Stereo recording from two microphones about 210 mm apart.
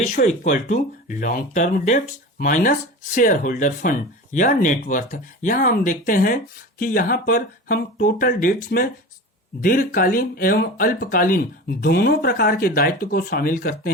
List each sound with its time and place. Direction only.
0.0 s speech: 35° left (ahead or behind)